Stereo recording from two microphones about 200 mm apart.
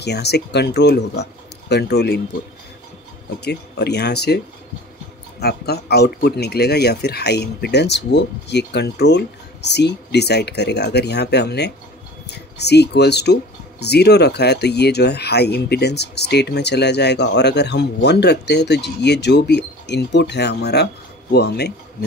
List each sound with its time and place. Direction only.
0.0 s speech: 55° left (ahead or behind)
3.3 s speech: 55° left (ahead or behind)
5.4 s speech: 55° left (ahead or behind)